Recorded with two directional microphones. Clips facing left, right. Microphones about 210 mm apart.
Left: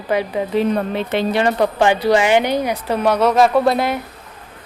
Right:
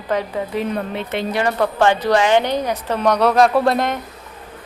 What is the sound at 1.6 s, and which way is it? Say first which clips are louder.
A woman's voice: left 1 dB; 15° left (ahead or behind).